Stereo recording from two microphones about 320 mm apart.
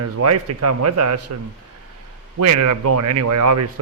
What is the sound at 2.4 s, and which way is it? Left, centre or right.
Speech, right.